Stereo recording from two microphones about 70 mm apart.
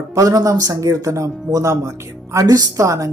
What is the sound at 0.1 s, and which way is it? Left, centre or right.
Speech, right.